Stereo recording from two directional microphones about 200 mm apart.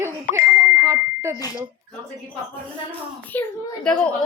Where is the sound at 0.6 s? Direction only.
10° right (ahead or behind).